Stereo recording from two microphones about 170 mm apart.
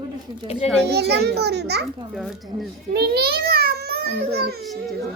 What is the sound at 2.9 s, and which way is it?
A child's voice, 70° right (ahead or behind).